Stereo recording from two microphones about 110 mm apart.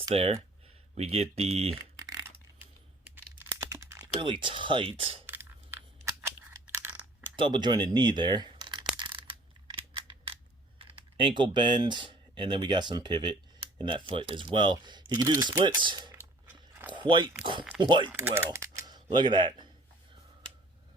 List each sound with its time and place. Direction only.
0.1 s speech: 65° right (ahead or behind)
2.0 s a sound: 30° right (ahead or behind)
3.3 s computer keyboard: 25° right (ahead or behind)
4.0 s speech: 50° right (ahead or behind)
5.2 s crunch: 20° right (ahead or behind)
6.9 s a sound: 15° right (ahead or behind)
7.3 s speech: 45° right (ahead or behind)
9.6 s a sound: 50° right (ahead or behind)
10.8 s speech: 50° right (ahead or behind)
16.5 s biting: 15° right (ahead or behind)
16.9 s speech: 45° right (ahead or behind)
18.1 s mechanisms: 20° right (ahead or behind)
19.1 s speech: 45° right (ahead or behind)